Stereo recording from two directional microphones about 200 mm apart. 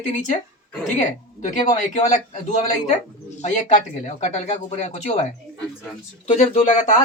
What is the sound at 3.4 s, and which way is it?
Speech, 35° left (ahead or behind).